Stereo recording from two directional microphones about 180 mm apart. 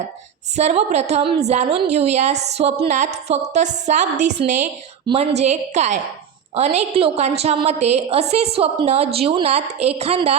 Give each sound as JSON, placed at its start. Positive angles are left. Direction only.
{"t": 0.5, "sound": "a woman's voice", "side_deg": -40}